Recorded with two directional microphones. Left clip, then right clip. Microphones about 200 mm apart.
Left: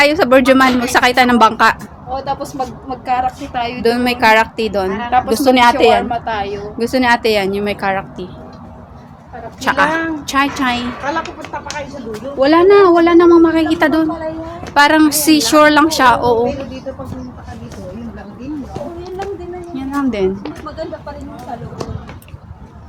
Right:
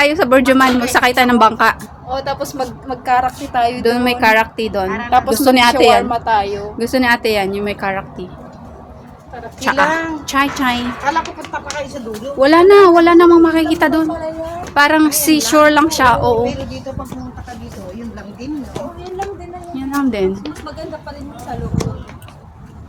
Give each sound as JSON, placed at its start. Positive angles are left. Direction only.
{"t": 0.0, "sound": "a woman's voice", "side_deg": 5}
{"t": 2.1, "sound": "a woman's voice", "side_deg": -15}
{"t": 3.8, "sound": "a woman's voice", "side_deg": 0}
{"t": 6.1, "sound": "a woman's voice", "side_deg": -20}
{"t": 6.6, "sound": "a woman's voice", "side_deg": 0}
{"t": 9.6, "sound": "a woman's voice", "side_deg": 0}
{"t": 12.4, "sound": "a woman's voice", "side_deg": -5}
{"t": 19.7, "sound": "a woman's voice", "side_deg": 0}